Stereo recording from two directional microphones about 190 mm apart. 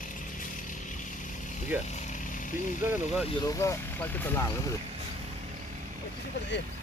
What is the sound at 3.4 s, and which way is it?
Speech, 15° left (ahead or behind).